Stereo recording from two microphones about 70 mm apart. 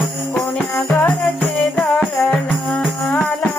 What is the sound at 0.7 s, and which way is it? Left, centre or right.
Music, left.